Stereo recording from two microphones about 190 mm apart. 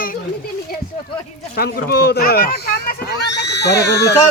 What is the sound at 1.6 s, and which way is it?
Speech, 55° left (ahead or behind).